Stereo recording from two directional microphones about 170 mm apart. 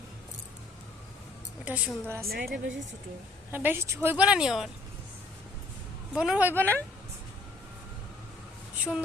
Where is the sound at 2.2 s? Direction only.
65° right (ahead or behind).